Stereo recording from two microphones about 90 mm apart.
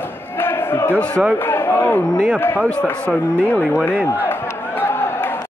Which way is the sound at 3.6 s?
5° right (ahead or behind).